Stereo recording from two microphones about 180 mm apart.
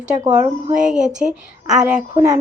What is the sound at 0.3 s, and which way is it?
A woman's voice, 5° right (ahead or behind).